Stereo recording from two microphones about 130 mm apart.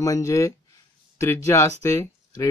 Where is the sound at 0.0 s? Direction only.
25° left (ahead or behind).